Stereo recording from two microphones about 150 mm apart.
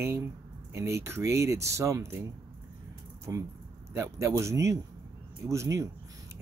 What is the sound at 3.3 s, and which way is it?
Speech, 20° right (ahead or behind).